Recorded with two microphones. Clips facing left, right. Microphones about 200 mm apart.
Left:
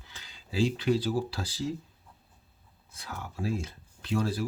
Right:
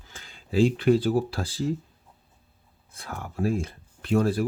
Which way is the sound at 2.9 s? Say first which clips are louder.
Right 6 dB; 55° right (ahead or behind).